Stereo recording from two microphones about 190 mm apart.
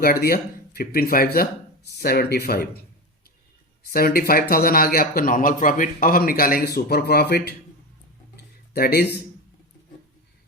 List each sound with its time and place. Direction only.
0.0 s a man's voice: 50° left (ahead or behind)
3.8 s a man's voice: 50° left (ahead or behind)
8.4 s a sound: 55° left (ahead or behind)